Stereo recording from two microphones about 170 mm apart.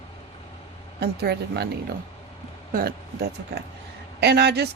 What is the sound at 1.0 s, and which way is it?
Speech, 70° right (ahead or behind).